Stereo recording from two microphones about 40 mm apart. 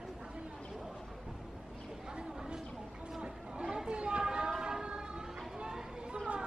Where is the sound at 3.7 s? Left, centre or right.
Right.